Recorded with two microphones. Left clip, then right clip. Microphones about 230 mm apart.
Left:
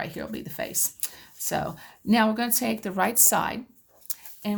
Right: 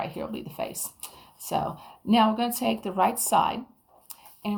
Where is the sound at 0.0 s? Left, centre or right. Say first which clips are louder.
Right 1 dB; left.